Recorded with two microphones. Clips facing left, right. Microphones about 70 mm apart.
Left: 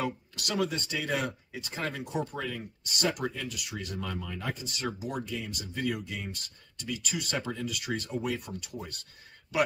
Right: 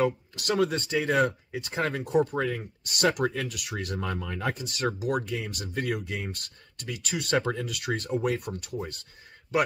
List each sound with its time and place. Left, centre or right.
0.6 s speech: right